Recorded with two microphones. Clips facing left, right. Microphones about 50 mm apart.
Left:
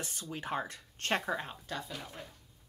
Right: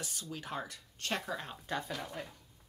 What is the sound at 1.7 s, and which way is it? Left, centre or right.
Speech, centre.